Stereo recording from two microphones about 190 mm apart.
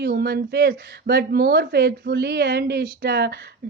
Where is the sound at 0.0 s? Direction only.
55° right (ahead or behind).